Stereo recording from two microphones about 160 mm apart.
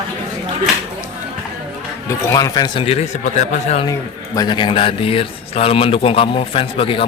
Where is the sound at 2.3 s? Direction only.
20° left (ahead or behind); by 3.9 s 45° left (ahead or behind).